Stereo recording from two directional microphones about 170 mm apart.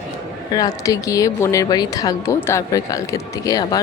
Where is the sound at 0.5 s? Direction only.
20° left (ahead or behind).